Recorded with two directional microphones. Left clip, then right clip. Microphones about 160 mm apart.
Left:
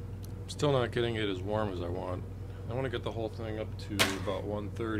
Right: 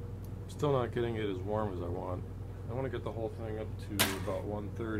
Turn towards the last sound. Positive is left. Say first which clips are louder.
# left 3 dB
turn(degrees=15)  # may be behind; listen again after turning